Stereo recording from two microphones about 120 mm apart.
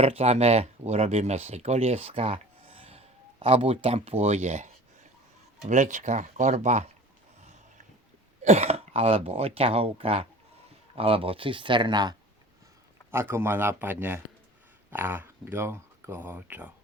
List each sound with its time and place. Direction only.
0.0 s speech: 55° right (ahead or behind); by 4.7 s 75° right (ahead or behind)
5.6 s speech: 90° right; by 6.9 s 70° right (ahead or behind)
8.4 s speech: 65° right (ahead or behind); by 12.1 s 40° right (ahead or behind)
13.1 s speech: 20° right (ahead or behind)